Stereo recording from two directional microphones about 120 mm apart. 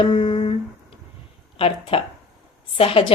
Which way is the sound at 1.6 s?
50° left (ahead or behind).